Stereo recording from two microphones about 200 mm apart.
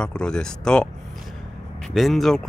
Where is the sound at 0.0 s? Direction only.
5° left (ahead or behind).